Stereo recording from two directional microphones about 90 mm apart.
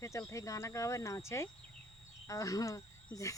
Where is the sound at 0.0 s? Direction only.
35° left (ahead or behind).